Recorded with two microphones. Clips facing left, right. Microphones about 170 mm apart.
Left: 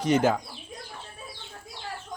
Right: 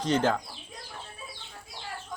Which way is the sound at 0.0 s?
10° left (ahead or behind).